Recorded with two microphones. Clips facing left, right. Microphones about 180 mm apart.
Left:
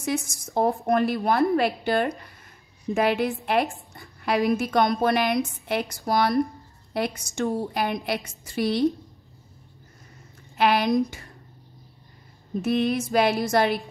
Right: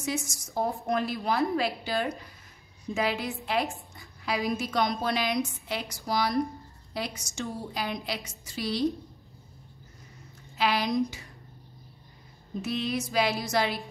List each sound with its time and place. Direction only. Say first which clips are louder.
0.0 s a woman's voice: left 5 dB; 55° left (ahead or behind)
10.6 s a woman's voice: left 5 dB; 55° left (ahead or behind)
12.6 s music: left 7 dB; 55° left (ahead or behind)